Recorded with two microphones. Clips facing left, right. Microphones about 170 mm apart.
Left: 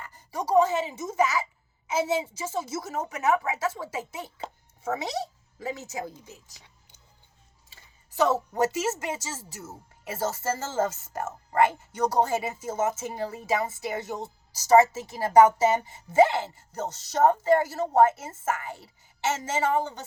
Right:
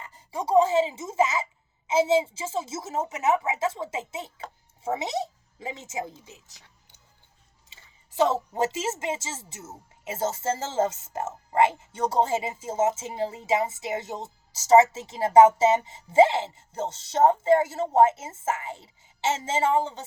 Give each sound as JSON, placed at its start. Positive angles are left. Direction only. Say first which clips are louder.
{"t": 0.0, "sound": "a woman's voice", "louder": "right 1 dB", "side_deg": -25}
{"t": 7.7, "sound": "speech", "louder": "right 1 dB", "side_deg": -25}